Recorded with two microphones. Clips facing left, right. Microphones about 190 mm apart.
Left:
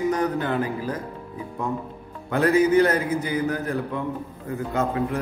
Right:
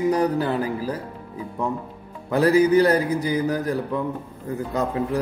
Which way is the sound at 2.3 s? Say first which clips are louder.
Right 2 dB; 35° right (ahead or behind).